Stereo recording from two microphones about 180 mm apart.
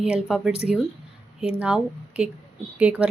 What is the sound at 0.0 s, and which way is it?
Speech, 5° right (ahead or behind).